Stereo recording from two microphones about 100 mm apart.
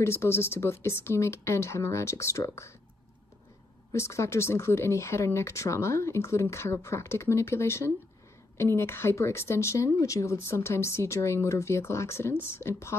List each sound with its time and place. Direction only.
0.0 s speech: 25° left (ahead or behind)
3.9 s speech: 30° left (ahead or behind)